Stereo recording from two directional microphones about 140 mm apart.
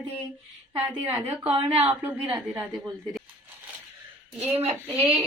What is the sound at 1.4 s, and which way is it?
Speech, 40° right (ahead or behind).